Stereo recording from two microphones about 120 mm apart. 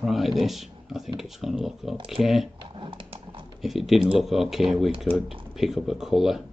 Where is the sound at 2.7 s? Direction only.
45° right (ahead or behind).